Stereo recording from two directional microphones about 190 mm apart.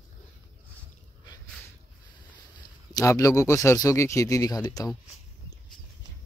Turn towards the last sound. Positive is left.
turn(degrees=20)  # may be behind; listen again after turning